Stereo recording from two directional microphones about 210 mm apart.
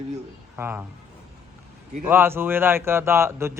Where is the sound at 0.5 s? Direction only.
10° right (ahead or behind).